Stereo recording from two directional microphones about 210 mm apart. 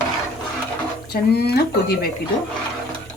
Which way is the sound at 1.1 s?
50° left (ahead or behind).